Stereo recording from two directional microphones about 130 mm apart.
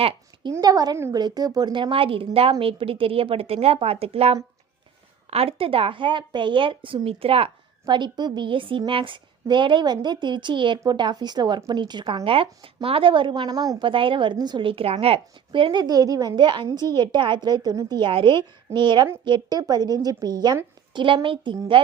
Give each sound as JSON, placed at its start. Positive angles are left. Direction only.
{"t": 0.5, "sound": "a woman's voice", "side_deg": -30}
{"t": 7.9, "sound": "a woman's voice", "side_deg": -35}
{"t": 16.3, "sound": "a woman's voice", "side_deg": -40}